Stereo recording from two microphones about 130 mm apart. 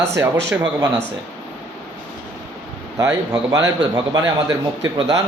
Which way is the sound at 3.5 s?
25° right (ahead or behind).